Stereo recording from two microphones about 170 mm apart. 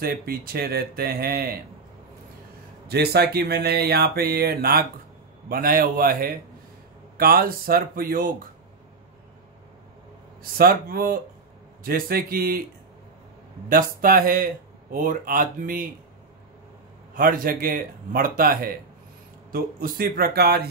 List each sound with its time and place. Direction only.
0.0 s speech: 60° right (ahead or behind)
2.9 s speech: 70° right (ahead or behind)
10.4 s speech: 60° right (ahead or behind)
13.7 s speech: 60° right (ahead or behind)
17.1 s speech: 55° right (ahead or behind)